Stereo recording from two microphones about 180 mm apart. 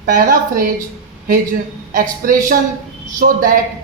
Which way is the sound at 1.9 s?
50° right (ahead or behind).